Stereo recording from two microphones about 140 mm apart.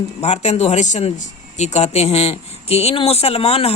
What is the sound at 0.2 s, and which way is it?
Speech, 50° left (ahead or behind).